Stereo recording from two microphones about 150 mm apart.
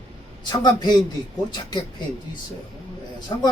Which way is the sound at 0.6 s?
30° left (ahead or behind).